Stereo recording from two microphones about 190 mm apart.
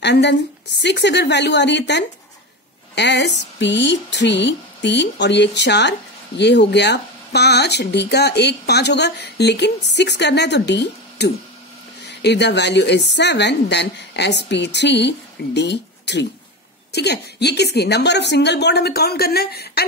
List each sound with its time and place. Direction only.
0.0 s speech: 65° left (ahead or behind)